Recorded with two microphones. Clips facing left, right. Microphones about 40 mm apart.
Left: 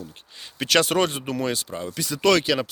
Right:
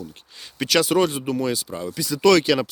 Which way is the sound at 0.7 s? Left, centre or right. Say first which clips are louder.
Right 1 dB; left.